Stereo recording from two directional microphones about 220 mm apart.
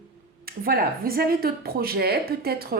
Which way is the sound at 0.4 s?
40° right (ahead or behind).